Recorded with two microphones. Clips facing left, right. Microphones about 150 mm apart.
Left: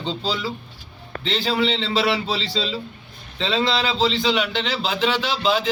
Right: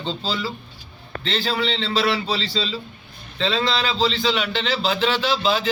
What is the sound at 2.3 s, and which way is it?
A man's voice, 15° left (ahead or behind).